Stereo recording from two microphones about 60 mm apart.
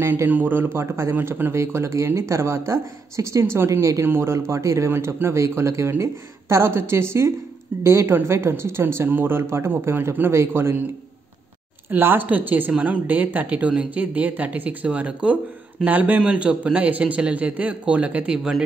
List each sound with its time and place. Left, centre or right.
0.3 s a woman's voice: right
0.7 s speech: right
1.1 s speech: right
11.9 s a woman's voice: right; by 18.6 s centre